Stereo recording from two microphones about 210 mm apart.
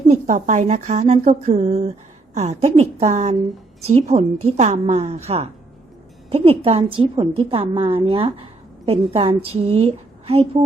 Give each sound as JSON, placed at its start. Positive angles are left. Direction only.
{"t": 0.1, "sound": "a woman's voice", "side_deg": -35}